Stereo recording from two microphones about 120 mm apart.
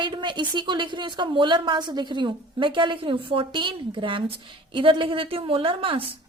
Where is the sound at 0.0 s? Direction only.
40° right (ahead or behind).